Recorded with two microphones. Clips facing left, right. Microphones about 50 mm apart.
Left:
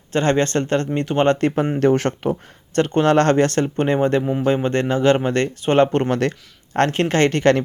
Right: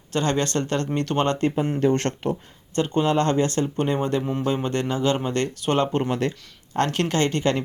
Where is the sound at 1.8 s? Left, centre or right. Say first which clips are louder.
Left 5 dB; left.